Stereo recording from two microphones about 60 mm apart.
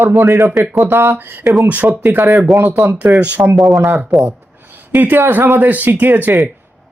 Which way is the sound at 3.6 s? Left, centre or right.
Centre.